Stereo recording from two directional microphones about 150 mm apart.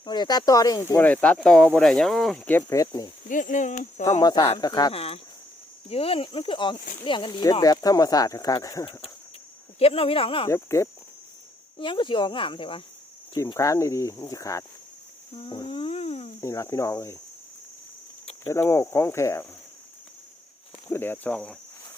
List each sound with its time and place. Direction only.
0.0 s speech: 30° left (ahead or behind)
3.2 s speech: 60° left (ahead or behind)
4.2 s speech: 25° left (ahead or behind)
4.9 s speech: 40° left (ahead or behind); by 8.9 s 25° left (ahead or behind)
8.9 s speech: 35° left (ahead or behind)
10.5 s speech: 20° left (ahead or behind)
11.8 s speech: 35° left (ahead or behind)
13.3 s speech: 20° left (ahead or behind)
15.4 s a sound: 30° left (ahead or behind)
16.4 s speech: 20° left (ahead or behind)
18.4 s speech: 20° left (ahead or behind)
20.9 s speech: 15° left (ahead or behind)